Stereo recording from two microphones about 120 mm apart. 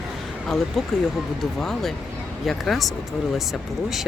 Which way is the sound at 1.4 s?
5° left (ahead or behind).